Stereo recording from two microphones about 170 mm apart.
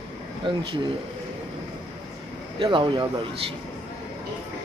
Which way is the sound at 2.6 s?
30° right (ahead or behind).